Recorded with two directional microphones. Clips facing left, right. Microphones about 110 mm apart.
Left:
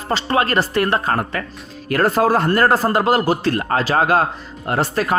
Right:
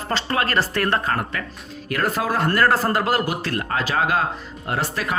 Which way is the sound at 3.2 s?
35° left (ahead or behind).